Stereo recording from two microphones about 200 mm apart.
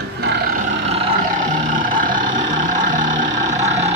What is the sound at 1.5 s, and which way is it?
Vehicle, 40° right (ahead or behind).